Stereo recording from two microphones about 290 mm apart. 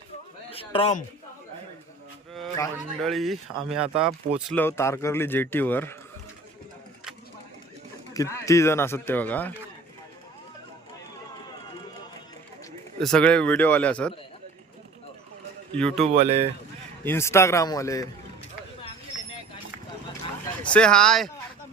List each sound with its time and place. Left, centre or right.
0.5 s a man's voice: centre
2.3 s speech: centre
8.1 s speech: centre
13.0 s speech: centre
15.7 s speech: centre
16.1 s speech: right
17.0 s speech: centre
20.7 s speech: centre